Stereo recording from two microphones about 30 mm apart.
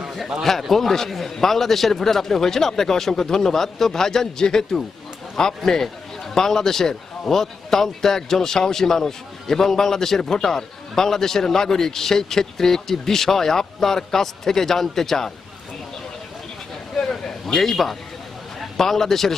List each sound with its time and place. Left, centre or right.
0.7 s a man's voice: centre
17.0 s a sound: centre
17.4 s a man's voice: centre